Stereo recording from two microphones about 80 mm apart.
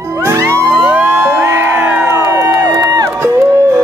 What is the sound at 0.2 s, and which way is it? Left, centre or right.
Music, right.